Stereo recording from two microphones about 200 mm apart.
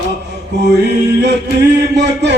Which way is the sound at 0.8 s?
60° right (ahead or behind).